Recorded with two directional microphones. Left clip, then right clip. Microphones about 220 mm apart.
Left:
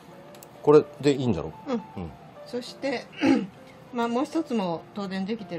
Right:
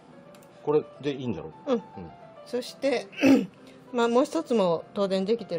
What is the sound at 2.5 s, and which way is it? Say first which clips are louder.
A woman's voice: right 3 dB; 45° right (ahead or behind).